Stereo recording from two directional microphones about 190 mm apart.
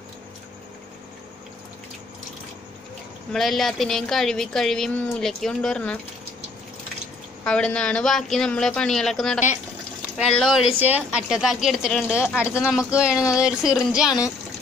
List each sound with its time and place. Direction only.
3.3 s speech: centre (ahead or behind)
7.4 s speech: 5° left (ahead or behind)
13.1 s speech: 15° left (ahead or behind)
13.4 s speech: 5° right (ahead or behind)